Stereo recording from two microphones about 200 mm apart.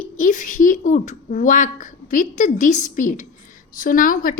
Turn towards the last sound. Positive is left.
turn(degrees=45)  # may be behind; listen again after turning